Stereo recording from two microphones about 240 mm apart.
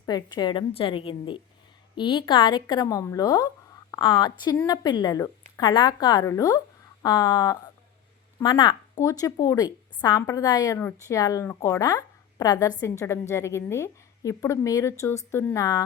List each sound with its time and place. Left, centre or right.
0.0 s a woman's voice: centre